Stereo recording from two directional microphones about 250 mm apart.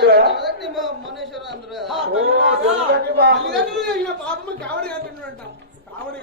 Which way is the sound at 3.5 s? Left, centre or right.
Centre.